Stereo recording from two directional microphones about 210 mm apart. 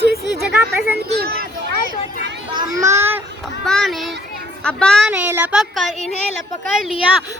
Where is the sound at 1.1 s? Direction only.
45° right (ahead or behind).